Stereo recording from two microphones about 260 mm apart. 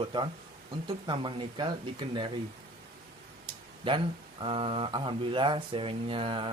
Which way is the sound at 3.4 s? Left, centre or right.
Centre.